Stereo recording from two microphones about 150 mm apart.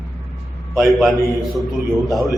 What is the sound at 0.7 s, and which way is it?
Speech, centre (ahead or behind).